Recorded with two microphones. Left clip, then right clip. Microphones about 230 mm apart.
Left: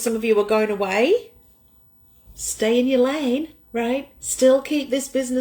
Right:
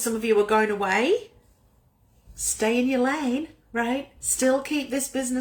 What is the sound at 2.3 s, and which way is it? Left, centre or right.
A woman's voice, centre.